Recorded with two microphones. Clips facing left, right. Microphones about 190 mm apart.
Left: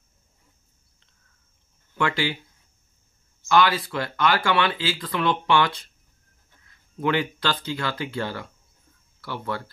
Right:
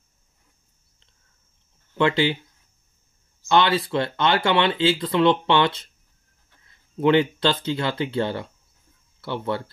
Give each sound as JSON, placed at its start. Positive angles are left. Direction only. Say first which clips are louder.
{"t": 2.0, "sound": "speech", "louder": "right 5 dB", "side_deg": -25}
{"t": 3.4, "sound": "speech", "louder": "right 1 dB", "side_deg": -25}